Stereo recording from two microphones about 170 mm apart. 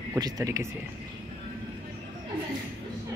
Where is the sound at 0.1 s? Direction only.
20° right (ahead or behind).